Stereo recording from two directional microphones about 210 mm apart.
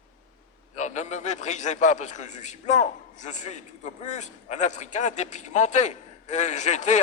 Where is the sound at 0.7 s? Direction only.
35° left (ahead or behind).